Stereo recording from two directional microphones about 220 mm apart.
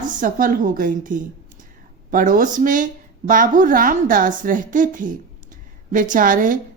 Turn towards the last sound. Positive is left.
turn(degrees=-40)  # may be behind; listen again after turning